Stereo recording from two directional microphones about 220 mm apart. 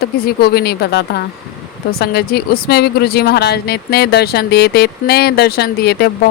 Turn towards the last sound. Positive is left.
turn(degrees=45)  # may be behind; listen again after turning